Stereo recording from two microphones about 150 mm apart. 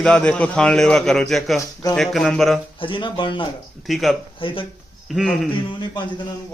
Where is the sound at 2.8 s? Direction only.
35° left (ahead or behind).